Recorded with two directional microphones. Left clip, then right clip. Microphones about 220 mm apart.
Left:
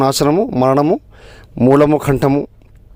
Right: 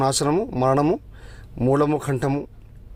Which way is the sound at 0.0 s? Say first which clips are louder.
Left 8 dB; 35° left (ahead or behind).